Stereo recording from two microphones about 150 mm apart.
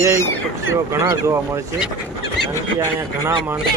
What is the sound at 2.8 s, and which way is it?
Speech, 20° right (ahead or behind).